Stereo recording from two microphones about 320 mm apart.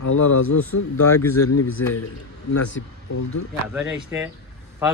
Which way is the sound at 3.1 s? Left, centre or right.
Left.